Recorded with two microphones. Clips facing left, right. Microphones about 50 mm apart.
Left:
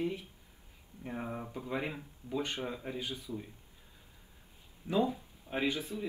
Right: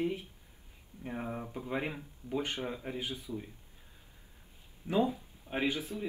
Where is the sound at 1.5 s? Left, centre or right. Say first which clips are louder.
Right 1 dB; centre.